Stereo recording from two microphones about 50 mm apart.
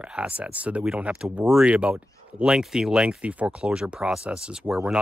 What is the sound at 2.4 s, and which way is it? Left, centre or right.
Speech, centre.